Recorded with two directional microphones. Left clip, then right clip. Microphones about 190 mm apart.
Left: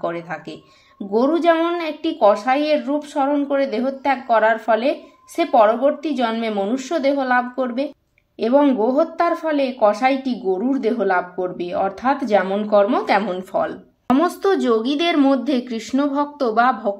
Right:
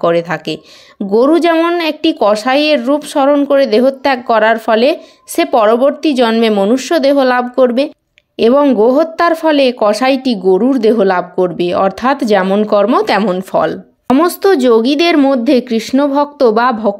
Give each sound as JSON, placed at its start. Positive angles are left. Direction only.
{"t": 0.0, "sound": "speech", "side_deg": -45}